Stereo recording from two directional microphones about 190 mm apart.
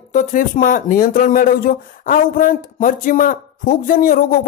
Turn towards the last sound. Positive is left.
turn(degrees=45)  # may be behind; listen again after turning